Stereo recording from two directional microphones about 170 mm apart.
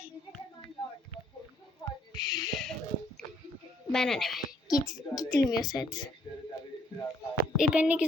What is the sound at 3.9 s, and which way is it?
Speech, 5° left (ahead or behind).